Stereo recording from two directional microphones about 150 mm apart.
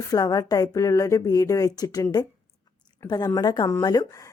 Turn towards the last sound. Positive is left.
turn(degrees=25)  # may be behind; listen again after turning